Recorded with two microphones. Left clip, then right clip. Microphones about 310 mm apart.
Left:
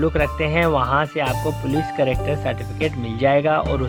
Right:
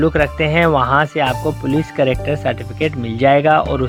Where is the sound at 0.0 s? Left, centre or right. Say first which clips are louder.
Right 5 dB; centre.